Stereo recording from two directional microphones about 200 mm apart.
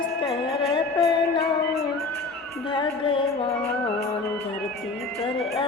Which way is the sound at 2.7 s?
25° left (ahead or behind).